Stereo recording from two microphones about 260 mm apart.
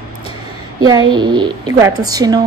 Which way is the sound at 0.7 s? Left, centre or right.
Centre.